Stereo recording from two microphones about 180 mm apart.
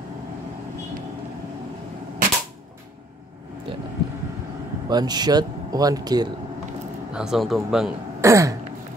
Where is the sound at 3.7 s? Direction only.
30° right (ahead or behind).